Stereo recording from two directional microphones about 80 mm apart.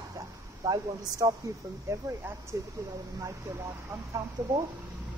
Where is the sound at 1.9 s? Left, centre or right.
Right.